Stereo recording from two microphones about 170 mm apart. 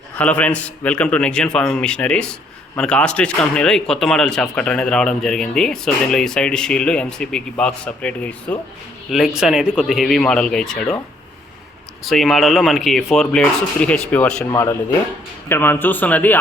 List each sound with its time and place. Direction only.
0.2 s a man's voice: 10° left (ahead or behind)
12.0 s a man's voice: centre (ahead or behind)